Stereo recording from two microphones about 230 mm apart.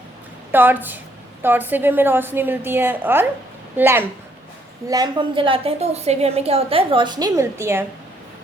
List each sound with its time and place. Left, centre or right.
0.5 s a woman's voice: centre